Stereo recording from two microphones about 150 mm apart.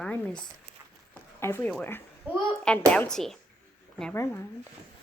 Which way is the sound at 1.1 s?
15° left (ahead or behind).